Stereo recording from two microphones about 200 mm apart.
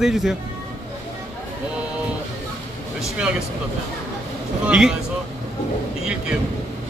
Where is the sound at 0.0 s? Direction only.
Centre (ahead or behind).